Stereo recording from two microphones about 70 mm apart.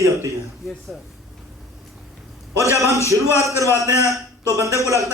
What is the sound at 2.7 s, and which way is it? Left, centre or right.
A man's voice, right.